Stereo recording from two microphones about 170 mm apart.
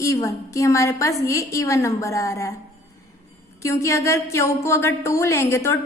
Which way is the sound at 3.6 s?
15° left (ahead or behind).